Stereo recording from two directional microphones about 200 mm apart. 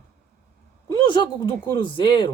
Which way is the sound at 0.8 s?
25° left (ahead or behind).